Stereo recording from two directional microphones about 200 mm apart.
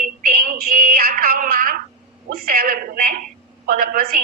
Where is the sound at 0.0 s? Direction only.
45° right (ahead or behind).